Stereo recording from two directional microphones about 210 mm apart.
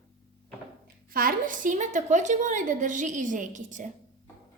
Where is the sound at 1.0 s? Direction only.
40° right (ahead or behind).